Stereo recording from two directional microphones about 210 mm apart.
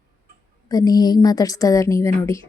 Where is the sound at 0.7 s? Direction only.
15° left (ahead or behind).